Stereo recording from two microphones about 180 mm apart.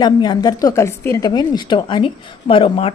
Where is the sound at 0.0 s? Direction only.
25° left (ahead or behind).